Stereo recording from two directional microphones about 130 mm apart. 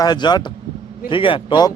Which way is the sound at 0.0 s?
35° left (ahead or behind).